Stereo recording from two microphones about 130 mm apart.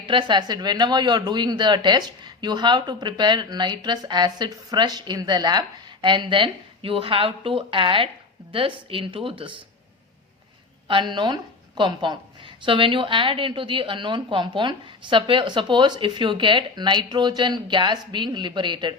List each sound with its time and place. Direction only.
0.1 s a woman's voice: 40° right (ahead or behind)
10.8 s a woman's voice: 40° right (ahead or behind)